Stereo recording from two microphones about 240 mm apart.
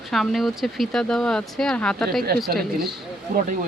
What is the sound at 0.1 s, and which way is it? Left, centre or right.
Speech, centre.